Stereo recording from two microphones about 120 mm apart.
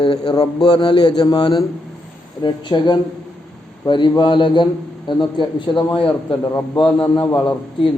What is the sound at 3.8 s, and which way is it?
Speech, 40° left (ahead or behind).